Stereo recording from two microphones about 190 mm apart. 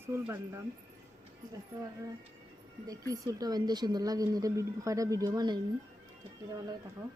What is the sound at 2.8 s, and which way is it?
Speech, 20° right (ahead or behind).